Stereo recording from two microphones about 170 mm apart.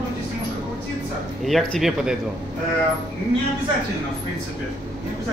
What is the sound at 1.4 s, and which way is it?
Speech, centre (ahead or behind).